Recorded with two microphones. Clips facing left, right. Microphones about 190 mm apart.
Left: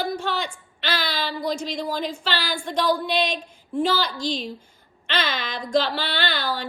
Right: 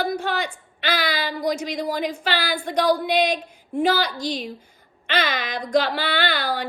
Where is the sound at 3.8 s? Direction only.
55° right (ahead or behind).